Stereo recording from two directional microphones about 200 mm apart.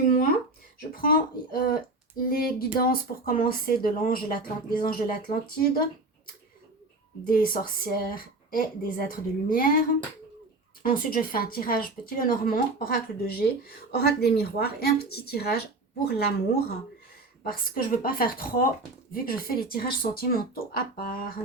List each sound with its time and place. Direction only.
0.9 s speech: 45° left (ahead or behind)
7.3 s speech: 45° left (ahead or behind)
10.9 s speech: 45° left (ahead or behind)